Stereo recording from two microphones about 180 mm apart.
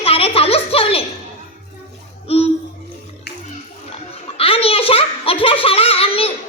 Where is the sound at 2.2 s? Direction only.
35° left (ahead or behind).